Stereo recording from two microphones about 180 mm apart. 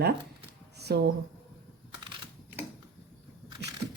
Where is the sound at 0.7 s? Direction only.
65° right (ahead or behind).